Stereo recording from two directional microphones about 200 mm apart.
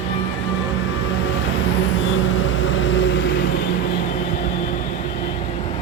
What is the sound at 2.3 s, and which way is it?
Vehicle, 75° left (ahead or behind).